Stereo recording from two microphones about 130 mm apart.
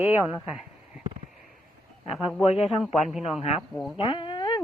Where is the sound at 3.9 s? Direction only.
40° left (ahead or behind).